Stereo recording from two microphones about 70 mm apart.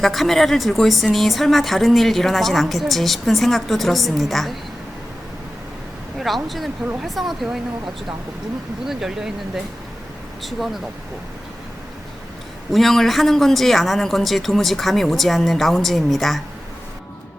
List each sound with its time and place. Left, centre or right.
0.0 s a woman's voice: centre
6.1 s a woman's voice: centre
8.9 s speech: centre
12.7 s a woman's voice: centre